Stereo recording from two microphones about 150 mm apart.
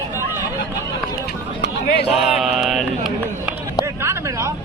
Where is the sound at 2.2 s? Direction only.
5° right (ahead or behind).